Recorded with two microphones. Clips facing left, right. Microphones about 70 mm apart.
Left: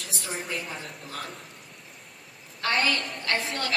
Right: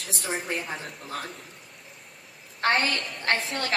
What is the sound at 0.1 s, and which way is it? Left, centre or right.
A woman's voice, right.